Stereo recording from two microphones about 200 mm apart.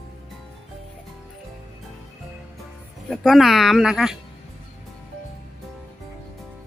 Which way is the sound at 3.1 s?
Centre (ahead or behind).